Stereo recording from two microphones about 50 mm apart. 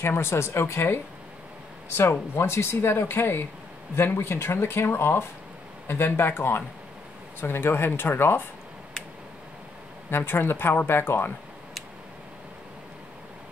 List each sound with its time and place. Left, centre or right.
0.0 s speech: left
10.1 s speech: left